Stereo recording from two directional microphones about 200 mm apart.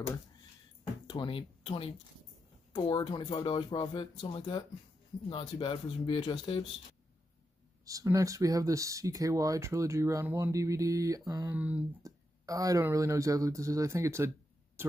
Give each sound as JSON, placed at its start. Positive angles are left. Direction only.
{"t": 1.0, "sound": "speech", "side_deg": 25}
{"t": 7.8, "sound": "speech", "side_deg": -15}
{"t": 11.5, "sound": "speech", "side_deg": -10}
{"t": 14.8, "sound": "a sound", "side_deg": -10}